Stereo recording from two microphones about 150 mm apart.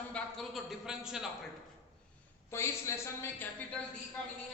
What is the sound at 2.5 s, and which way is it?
A woman's voice, 20° left (ahead or behind).